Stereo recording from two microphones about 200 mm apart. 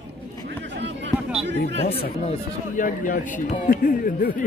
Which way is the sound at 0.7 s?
65° right (ahead or behind).